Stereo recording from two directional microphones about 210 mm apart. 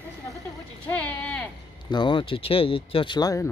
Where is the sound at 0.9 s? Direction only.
5° left (ahead or behind).